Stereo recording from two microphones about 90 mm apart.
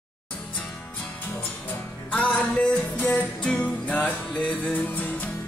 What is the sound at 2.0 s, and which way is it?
Music, 15° left (ahead or behind).